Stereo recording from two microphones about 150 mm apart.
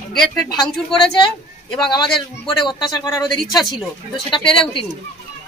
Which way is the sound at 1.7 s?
30° left (ahead or behind).